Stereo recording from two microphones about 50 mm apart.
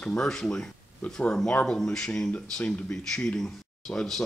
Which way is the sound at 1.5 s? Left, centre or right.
Left.